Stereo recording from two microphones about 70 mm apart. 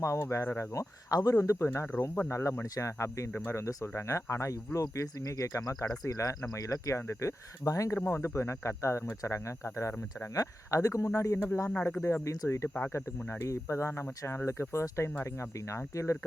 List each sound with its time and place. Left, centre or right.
0.0 s speech: left
0.7 s speech: left
7.9 s speech: left
11.3 s speech: left
11.7 s speech: left
12.0 s speech: left
13.1 s speech: left
13.4 s speech: left